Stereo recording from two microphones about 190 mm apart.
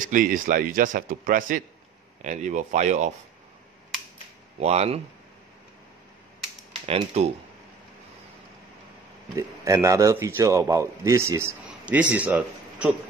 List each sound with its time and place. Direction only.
0.0 s speech: 45° right (ahead or behind)
4.6 s speech: 35° right (ahead or behind)
6.9 s speech: 30° right (ahead or behind)
9.3 s a man's voice: 15° right (ahead or behind)